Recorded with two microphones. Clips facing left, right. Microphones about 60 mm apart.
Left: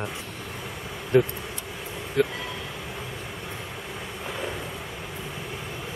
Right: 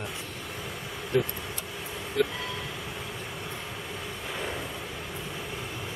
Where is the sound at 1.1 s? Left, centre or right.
Left.